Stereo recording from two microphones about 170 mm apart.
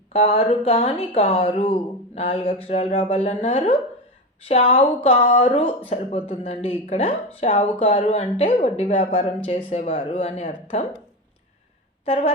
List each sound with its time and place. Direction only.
0.1 s speech: 35° left (ahead or behind)
12.0 s speech: 35° left (ahead or behind)